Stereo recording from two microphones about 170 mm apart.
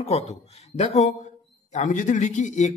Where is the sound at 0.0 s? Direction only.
40° left (ahead or behind).